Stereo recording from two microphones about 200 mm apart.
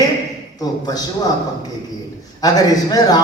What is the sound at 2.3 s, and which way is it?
Speech, 20° left (ahead or behind).